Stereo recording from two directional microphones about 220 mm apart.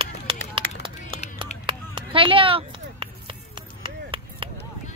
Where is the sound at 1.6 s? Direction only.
25° right (ahead or behind).